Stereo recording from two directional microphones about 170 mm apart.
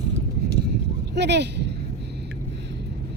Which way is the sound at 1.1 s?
85° right.